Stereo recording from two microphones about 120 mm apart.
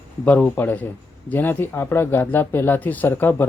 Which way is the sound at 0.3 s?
15° left (ahead or behind).